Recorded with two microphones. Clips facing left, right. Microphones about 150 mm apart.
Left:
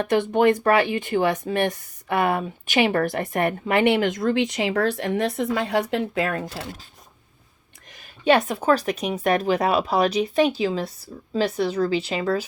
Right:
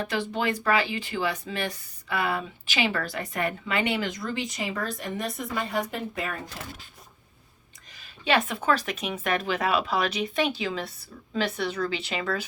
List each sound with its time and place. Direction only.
0.0 s speech: 55° left (ahead or behind); by 6.4 s 90° left
7.9 s speech: 50° left (ahead or behind)